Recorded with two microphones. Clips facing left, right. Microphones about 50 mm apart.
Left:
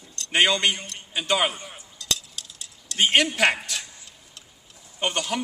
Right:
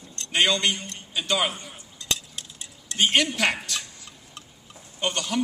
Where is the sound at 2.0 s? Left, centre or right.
Right.